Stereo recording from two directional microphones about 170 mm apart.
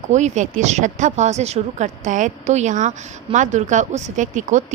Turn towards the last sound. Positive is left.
turn(degrees=-45)  # may be behind; listen again after turning